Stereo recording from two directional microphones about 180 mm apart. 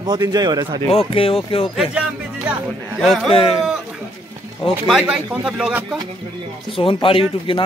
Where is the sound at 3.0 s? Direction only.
Centre (ahead or behind).